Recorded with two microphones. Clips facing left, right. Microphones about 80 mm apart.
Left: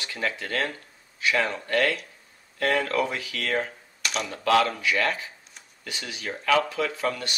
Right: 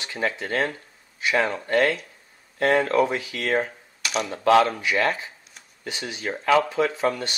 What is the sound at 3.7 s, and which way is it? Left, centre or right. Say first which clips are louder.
Computer keyboard: right 2 dB; centre.